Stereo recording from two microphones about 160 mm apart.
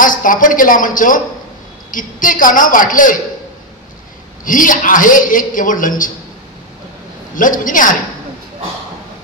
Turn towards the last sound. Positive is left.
turn(degrees=55)  # may be behind; listen again after turning